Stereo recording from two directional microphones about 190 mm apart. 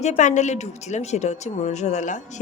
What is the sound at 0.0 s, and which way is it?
A woman's voice, 40° left (ahead or behind).